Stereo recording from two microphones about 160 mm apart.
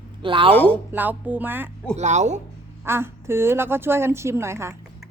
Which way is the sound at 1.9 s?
45° right (ahead or behind).